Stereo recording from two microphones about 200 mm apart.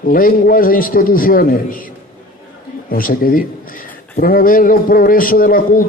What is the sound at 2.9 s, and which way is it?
A man's voice, 45° left (ahead or behind).